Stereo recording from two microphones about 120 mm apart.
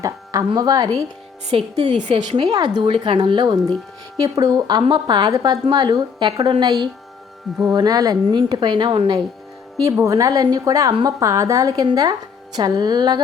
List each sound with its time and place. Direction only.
0.0 s speech: 30° right (ahead or behind)
1.5 s speech: 60° right (ahead or behind)
2.1 s a woman's voice: 40° right (ahead or behind)
9.7 s a woman's voice: 25° right (ahead or behind)